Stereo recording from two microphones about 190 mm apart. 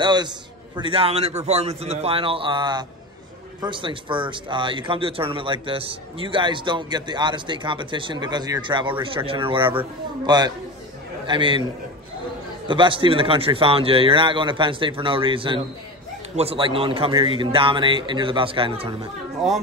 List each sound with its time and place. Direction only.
0.0 s speech: 25° right (ahead or behind)
12.6 s speech: 25° right (ahead or behind)